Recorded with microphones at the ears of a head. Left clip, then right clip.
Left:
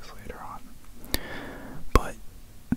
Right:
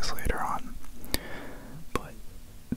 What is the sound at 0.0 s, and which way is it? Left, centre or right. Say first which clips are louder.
Whispering: right 10 dB; right.